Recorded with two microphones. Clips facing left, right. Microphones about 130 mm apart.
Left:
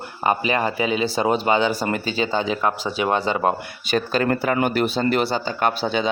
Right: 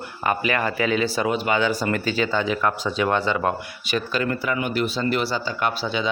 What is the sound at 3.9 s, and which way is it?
Speech, 45° left (ahead or behind).